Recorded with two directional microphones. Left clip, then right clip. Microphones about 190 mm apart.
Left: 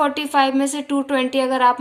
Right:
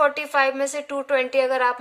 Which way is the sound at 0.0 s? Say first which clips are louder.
Left 2 dB; 15° right (ahead or behind).